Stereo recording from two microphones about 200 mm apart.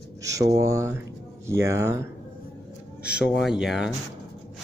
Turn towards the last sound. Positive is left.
turn(degrees=0)  # may be behind; listen again after turning